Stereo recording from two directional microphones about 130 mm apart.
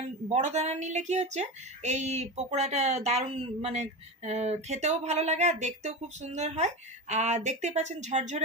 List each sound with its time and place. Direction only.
0.3 s speech: 65° right (ahead or behind)